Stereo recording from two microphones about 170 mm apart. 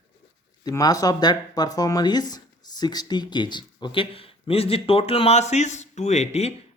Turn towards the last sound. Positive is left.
turn(degrees=40)  # may be behind; listen again after turning